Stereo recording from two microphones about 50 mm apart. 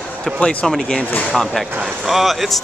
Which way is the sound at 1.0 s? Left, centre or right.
Left.